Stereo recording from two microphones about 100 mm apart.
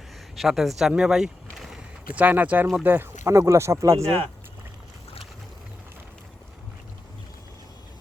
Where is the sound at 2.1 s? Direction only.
15° right (ahead or behind).